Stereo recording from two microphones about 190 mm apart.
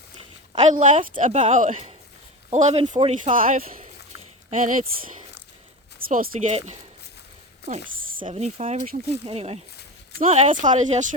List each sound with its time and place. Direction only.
0.2 s a sound: 35° right (ahead or behind)
1.2 s speech: 35° right (ahead or behind)
3.3 s speech: 45° right (ahead or behind)
6.0 s speech: 50° right (ahead or behind)